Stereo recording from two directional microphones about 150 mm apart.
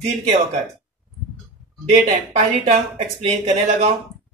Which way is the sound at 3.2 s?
45° right (ahead or behind).